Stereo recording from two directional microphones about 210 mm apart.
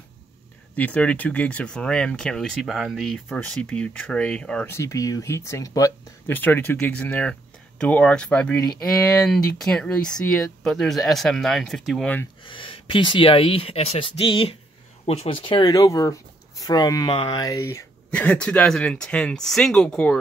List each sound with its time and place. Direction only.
0.7 s speech: 5° left (ahead or behind)
12.4 s speech: 25° left (ahead or behind); by 20.2 s 5° left (ahead or behind)